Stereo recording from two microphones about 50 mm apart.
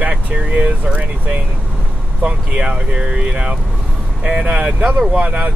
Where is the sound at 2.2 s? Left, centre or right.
Right.